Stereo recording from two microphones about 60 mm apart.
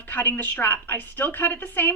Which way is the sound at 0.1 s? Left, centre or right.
Left.